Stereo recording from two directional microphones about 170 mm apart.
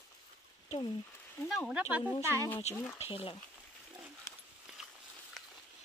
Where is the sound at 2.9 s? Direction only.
35° left (ahead or behind).